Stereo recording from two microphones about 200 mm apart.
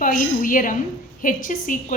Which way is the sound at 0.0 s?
40° left (ahead or behind).